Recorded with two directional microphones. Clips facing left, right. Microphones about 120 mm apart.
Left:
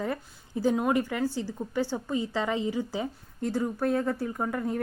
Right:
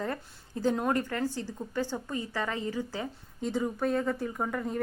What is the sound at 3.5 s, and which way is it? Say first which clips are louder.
A woman's voice: left 2 dB; 5° left (ahead or behind).